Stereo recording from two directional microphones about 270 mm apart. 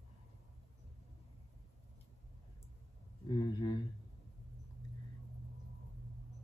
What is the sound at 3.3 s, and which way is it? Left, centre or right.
Speech, centre.